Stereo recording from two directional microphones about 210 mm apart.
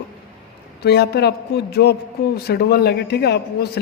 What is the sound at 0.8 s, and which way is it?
Speech, 50° left (ahead or behind).